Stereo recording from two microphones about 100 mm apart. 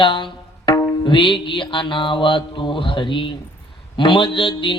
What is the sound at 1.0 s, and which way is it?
Mantra, 55° left (ahead or behind).